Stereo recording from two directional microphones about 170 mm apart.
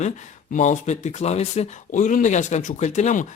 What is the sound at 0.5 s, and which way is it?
Speech, 45° left (ahead or behind).